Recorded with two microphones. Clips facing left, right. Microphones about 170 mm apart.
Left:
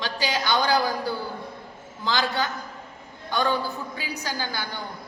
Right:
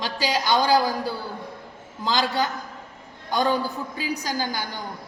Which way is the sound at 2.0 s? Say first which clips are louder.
Right 2 dB; 35° right (ahead or behind).